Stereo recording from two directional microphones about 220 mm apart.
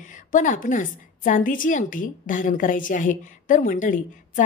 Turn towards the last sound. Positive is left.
turn(degrees=35)  # may be behind; listen again after turning